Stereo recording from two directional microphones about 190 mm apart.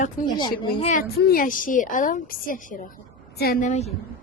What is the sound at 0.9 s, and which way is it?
Speech, 50° left (ahead or behind).